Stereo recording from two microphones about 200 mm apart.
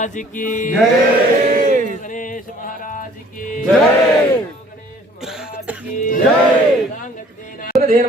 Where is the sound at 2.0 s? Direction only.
40° left (ahead or behind).